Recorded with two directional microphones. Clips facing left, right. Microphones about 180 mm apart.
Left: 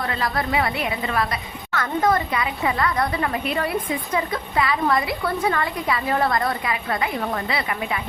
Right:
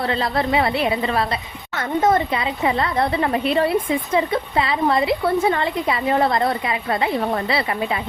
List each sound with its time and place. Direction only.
0.1 s a woman's voice: 25° right (ahead or behind)